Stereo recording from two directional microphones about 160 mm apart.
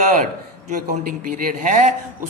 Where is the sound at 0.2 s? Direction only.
55° right (ahead or behind).